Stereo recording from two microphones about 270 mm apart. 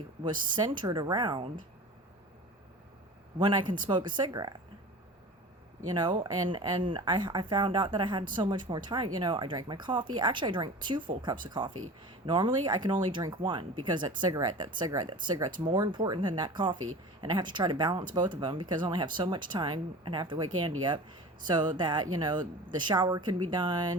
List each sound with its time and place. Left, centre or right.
0.2 s speech: centre
3.3 s speech: centre
5.9 s speech: centre